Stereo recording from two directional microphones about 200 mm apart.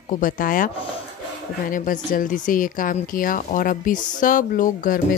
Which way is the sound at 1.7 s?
40° left (ahead or behind).